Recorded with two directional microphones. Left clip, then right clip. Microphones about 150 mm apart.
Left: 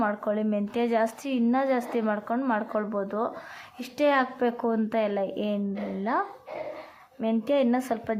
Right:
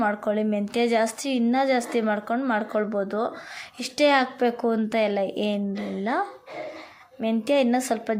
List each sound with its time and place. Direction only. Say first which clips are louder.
0.0 s a woman's voice: right 3 dB; 15° right (ahead or behind)